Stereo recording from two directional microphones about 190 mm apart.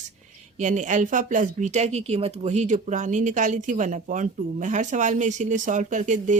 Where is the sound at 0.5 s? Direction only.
40° right (ahead or behind).